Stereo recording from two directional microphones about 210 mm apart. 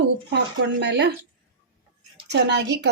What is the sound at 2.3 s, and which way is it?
Speech, 55° right (ahead or behind).